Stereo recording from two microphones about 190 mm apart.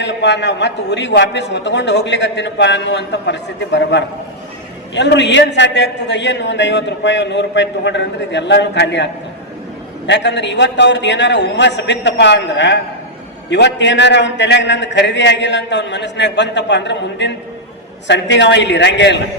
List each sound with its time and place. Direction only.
0.0 s a man's voice: 65° left (ahead or behind)
10.1 s a man's voice: 65° left (ahead or behind)